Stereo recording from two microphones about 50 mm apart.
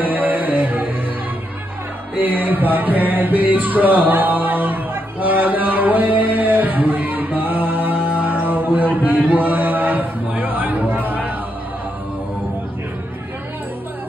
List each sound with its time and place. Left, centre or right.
0.0 s music: right
2.1 s music: right
8.9 s a sound: right
9.3 s chatter: right